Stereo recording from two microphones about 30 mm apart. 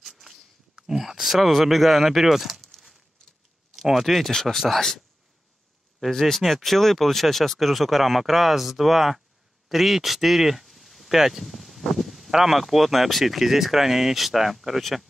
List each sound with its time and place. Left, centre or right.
0.0 s a sound: centre
1.2 s speech: centre
2.7 s a sound: centre
3.9 s speech: centre
4.3 s speech: centre
4.6 s speech: centre
11.1 s speech: centre
11.4 s speech: centre
14.8 s speech: centre